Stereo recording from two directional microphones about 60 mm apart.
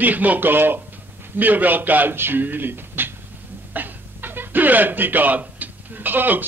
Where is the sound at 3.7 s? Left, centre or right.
Right.